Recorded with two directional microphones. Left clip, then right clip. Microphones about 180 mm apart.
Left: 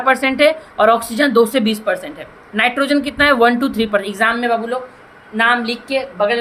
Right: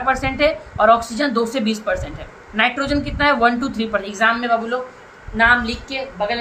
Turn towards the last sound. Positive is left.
turn(degrees=45)  # may be behind; listen again after turning